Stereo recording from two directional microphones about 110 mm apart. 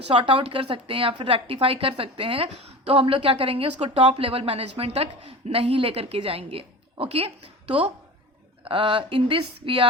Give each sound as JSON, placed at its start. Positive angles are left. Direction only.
{"t": 0.1, "sound": "a woman's voice", "side_deg": -55}